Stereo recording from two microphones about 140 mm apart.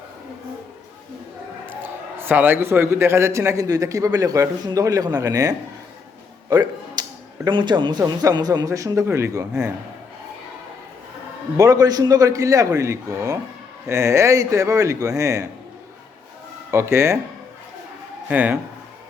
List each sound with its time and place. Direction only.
1.8 s a man's voice: 15° right (ahead or behind)
6.5 s a sound: 30° right (ahead or behind)
7.4 s a man's voice: 30° right (ahead or behind)
11.5 s a man's voice: 25° right (ahead or behind)
16.7 s a man's voice: 20° right (ahead or behind)
18.3 s speech: 10° right (ahead or behind)